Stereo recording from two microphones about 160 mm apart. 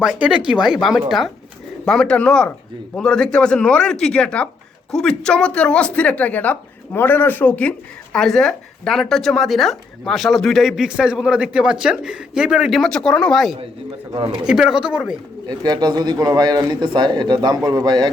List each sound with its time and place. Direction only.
0.0 s a woman's voice: 5° right (ahead or behind)
15.4 s a man's voice: 25° right (ahead or behind)